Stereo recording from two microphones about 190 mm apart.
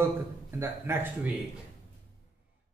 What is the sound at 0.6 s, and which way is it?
Speech, 10° right (ahead or behind).